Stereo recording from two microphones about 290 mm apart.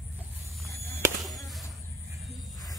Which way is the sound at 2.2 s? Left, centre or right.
Centre.